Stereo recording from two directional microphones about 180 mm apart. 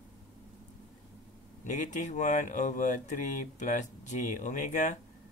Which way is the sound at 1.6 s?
40° left (ahead or behind).